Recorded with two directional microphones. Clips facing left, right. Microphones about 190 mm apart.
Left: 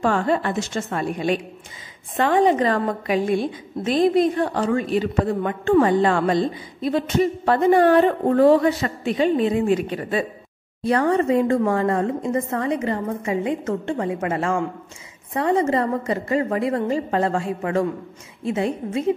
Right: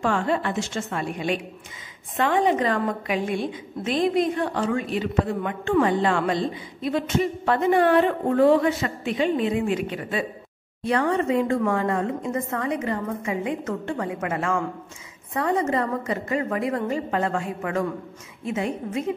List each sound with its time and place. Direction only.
0.0 s a woman's voice: 40° left (ahead or behind)